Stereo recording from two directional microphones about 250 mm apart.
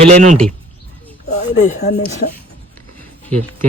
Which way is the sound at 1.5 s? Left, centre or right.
Left.